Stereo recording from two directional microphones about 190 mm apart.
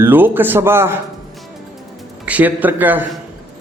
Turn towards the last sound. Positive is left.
turn(degrees=-10)  # may be behind; listen again after turning